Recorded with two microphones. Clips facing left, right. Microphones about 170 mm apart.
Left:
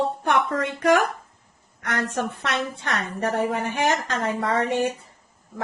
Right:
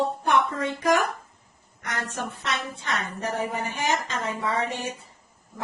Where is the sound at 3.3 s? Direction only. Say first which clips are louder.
Left 4 dB; 85° left.